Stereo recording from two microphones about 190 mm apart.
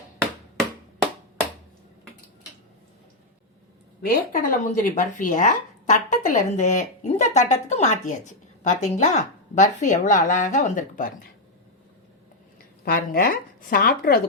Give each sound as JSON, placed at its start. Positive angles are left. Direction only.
{"t": 4.0, "sound": "a woman's voice", "side_deg": 50}
{"t": 12.8, "sound": "a woman's voice", "side_deg": 50}